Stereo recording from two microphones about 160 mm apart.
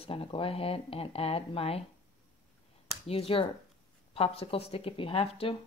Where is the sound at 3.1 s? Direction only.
35° left (ahead or behind).